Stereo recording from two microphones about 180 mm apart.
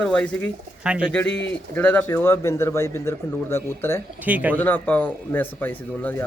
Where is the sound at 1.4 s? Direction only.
10° left (ahead or behind).